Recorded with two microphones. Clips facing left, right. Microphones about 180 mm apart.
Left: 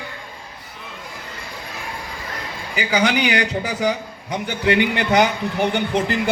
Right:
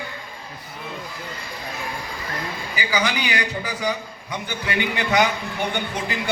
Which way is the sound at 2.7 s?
65° left (ahead or behind).